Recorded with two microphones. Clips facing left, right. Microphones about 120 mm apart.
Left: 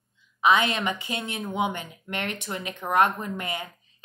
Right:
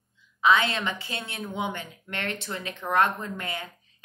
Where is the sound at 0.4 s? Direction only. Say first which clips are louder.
Left 1 dB; 15° left (ahead or behind).